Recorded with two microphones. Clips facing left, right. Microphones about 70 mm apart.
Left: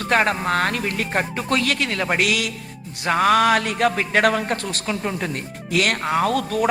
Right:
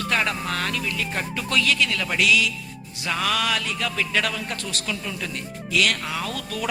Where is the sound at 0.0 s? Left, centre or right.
Left.